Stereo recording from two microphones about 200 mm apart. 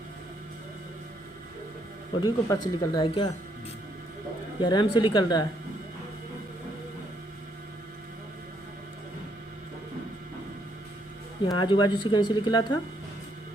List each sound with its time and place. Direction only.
2.2 s speech: 20° left (ahead or behind)
4.6 s speech: 25° left (ahead or behind)
11.4 s speech: 25° left (ahead or behind)